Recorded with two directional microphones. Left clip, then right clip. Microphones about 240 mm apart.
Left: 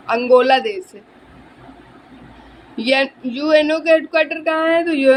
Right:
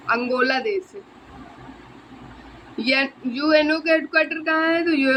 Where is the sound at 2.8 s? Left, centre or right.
Centre.